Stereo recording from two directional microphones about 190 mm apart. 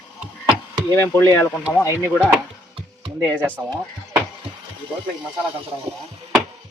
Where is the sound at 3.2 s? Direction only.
5° left (ahead or behind).